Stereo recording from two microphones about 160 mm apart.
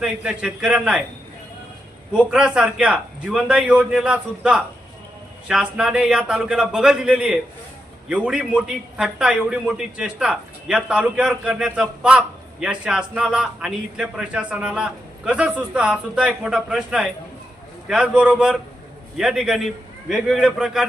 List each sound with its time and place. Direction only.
0.0 s a man's voice: 5° right (ahead or behind)
2.1 s a man's voice: 5° right (ahead or behind)